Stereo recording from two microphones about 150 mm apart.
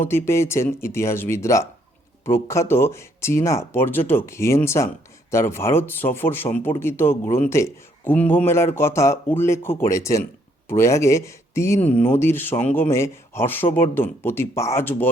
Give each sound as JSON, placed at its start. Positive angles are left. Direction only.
{"t": 0.0, "sound": "speech", "side_deg": 15}